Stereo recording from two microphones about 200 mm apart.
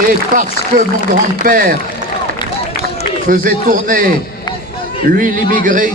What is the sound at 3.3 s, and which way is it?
Speech, 45° right (ahead or behind).